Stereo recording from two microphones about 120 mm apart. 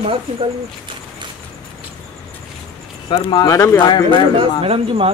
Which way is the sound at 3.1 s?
40° left (ahead or behind).